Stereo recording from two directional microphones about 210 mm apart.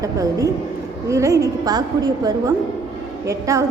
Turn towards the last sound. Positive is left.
turn(degrees=-15)  # may be behind; listen again after turning